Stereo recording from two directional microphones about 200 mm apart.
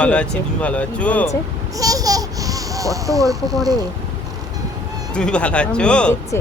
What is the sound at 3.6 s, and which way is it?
Speech, 20° right (ahead or behind).